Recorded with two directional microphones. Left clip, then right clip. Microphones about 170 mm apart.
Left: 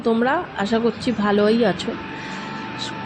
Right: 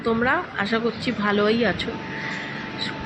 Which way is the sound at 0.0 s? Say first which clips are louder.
Left 2 dB; 40° left (ahead or behind).